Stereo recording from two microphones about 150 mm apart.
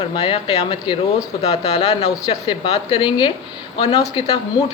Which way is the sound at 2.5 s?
35° left (ahead or behind).